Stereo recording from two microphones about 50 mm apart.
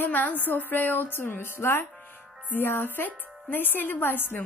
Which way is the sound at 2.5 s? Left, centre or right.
Left.